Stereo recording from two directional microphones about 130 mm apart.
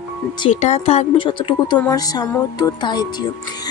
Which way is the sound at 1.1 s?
40° left (ahead or behind).